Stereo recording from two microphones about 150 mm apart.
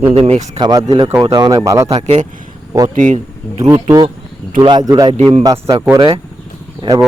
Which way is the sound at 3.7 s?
25° right (ahead or behind).